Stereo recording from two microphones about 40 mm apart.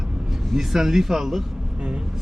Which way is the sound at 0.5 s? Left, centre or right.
Centre.